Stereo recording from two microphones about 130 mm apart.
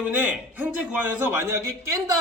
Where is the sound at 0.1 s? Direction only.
10° right (ahead or behind).